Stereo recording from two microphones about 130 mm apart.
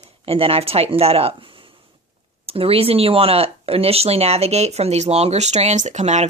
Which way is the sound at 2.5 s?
50° right (ahead or behind).